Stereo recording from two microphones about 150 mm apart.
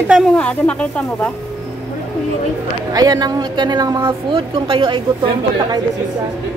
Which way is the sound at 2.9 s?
25° right (ahead or behind).